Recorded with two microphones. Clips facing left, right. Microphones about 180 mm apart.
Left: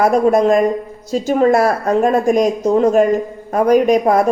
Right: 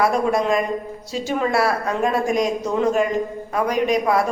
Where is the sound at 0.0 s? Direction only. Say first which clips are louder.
Left 7 dB; 45° left (ahead or behind).